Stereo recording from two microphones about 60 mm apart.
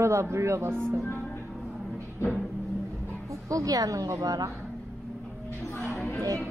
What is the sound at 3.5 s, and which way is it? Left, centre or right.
A woman's voice, right.